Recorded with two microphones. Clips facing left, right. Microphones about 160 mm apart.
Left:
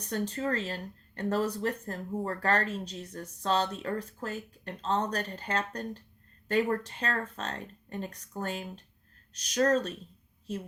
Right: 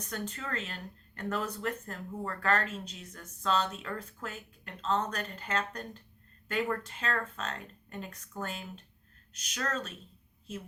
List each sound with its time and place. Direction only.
0.0 s speech: 35° left (ahead or behind)